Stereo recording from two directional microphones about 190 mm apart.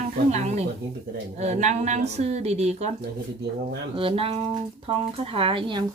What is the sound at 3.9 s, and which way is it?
Speech, 30° right (ahead or behind).